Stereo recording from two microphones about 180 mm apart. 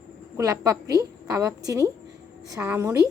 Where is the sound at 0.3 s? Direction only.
15° right (ahead or behind).